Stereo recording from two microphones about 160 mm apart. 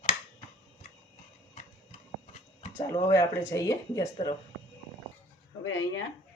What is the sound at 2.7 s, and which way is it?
Speech, 20° left (ahead or behind).